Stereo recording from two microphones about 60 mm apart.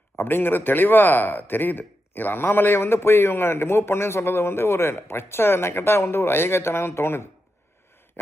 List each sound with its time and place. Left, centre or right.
0.2 s a man's voice: left